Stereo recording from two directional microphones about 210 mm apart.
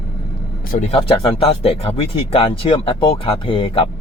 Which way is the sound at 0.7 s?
30° left (ahead or behind).